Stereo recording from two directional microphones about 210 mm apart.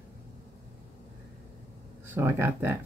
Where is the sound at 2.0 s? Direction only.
10° right (ahead or behind).